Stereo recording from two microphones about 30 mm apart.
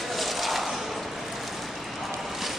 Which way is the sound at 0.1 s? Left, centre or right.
Centre.